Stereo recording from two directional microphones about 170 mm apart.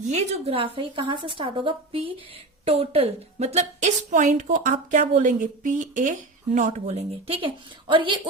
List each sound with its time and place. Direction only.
0.1 s a woman's voice: 40° right (ahead or behind)